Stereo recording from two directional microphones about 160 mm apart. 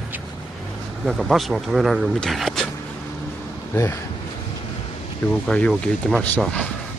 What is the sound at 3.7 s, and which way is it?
Speech, 15° left (ahead or behind).